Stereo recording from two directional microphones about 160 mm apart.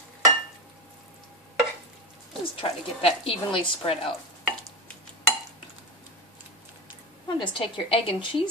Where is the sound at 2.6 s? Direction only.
35° left (ahead or behind).